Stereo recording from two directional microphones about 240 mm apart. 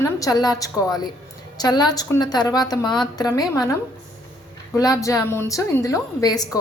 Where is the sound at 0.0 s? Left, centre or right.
Centre.